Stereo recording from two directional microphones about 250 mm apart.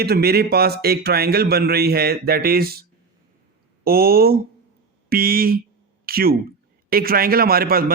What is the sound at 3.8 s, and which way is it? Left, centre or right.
A man's voice, right.